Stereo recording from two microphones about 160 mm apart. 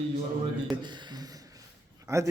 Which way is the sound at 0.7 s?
30° right (ahead or behind).